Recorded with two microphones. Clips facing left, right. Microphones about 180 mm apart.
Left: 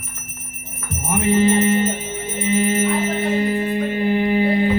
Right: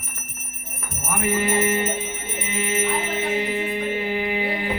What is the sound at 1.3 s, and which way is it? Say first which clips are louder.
Music: left 6 dB; 30° left (ahead or behind).